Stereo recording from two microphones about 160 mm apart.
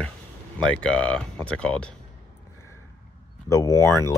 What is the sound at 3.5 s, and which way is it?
Speech, 20° left (ahead or behind).